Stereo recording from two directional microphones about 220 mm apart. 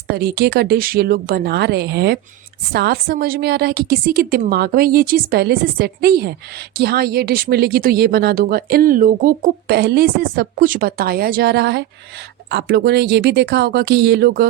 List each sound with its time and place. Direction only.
0.1 s speech: 45° right (ahead or behind)